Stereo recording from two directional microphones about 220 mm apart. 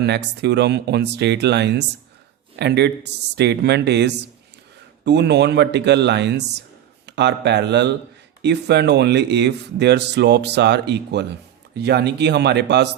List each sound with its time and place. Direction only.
0.0 s speech: 50° right (ahead or behind)